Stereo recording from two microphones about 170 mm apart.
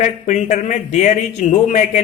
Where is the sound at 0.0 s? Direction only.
45° left (ahead or behind).